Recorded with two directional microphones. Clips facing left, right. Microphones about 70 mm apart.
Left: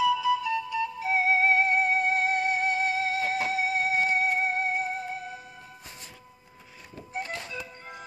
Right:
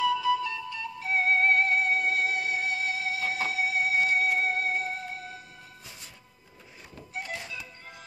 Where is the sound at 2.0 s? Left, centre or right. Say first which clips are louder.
Left 3 dB; left.